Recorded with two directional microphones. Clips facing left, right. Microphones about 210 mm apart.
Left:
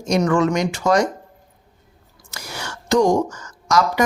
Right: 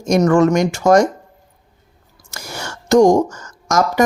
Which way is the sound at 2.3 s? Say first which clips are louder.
Right 3 dB; 45° right (ahead or behind).